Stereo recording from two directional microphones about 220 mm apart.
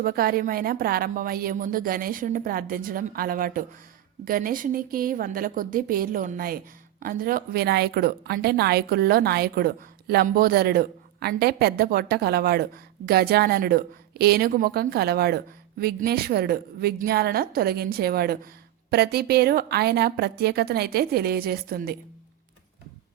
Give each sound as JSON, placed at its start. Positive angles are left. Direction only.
{"t": 0.0, "sound": "a woman's voice", "side_deg": -40}